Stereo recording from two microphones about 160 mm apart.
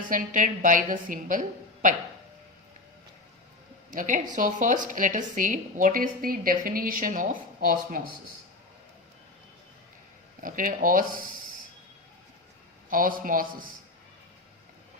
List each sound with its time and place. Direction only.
0.1 s a woman's voice: 55° right (ahead or behind)
3.9 s a woman's voice: 55° right (ahead or behind)
10.4 s a woman's voice: 55° right (ahead or behind)
12.9 s a woman's voice: 60° right (ahead or behind)